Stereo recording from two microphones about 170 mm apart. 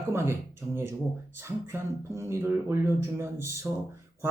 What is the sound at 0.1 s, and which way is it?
Speech, 15° right (ahead or behind).